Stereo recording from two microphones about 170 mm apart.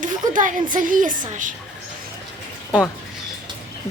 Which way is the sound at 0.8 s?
50° right (ahead or behind).